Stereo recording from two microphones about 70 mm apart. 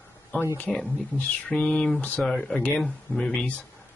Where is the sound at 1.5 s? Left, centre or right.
Centre.